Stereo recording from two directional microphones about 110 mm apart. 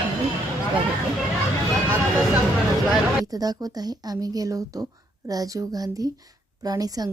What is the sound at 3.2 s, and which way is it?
Speech, 35° right (ahead or behind).